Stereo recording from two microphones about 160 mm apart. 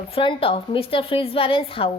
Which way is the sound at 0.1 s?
35° left (ahead or behind).